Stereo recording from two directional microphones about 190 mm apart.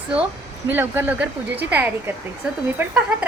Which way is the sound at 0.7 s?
10° right (ahead or behind).